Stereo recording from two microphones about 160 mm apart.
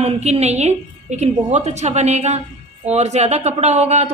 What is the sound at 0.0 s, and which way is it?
A woman's voice, 40° right (ahead or behind).